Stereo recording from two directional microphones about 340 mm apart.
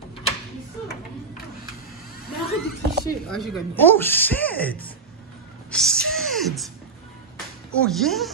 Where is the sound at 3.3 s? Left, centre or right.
Centre.